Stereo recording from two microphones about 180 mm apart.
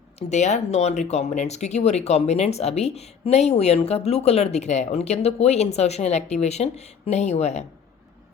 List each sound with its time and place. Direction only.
0.2 s speech: 40° left (ahead or behind)